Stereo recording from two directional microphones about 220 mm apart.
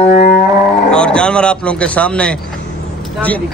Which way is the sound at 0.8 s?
5° left (ahead or behind).